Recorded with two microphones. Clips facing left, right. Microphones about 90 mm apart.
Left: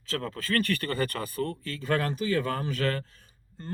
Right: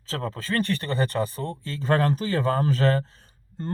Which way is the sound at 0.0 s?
30° right (ahead or behind).